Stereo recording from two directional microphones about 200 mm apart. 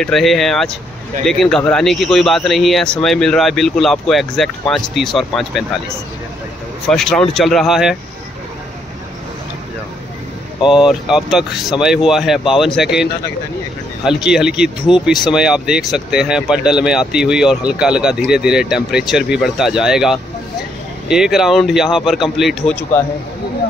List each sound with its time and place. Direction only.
0.0 s speech: centre (ahead or behind)
6.9 s speech: centre (ahead or behind)
10.7 s speech: 5° right (ahead or behind)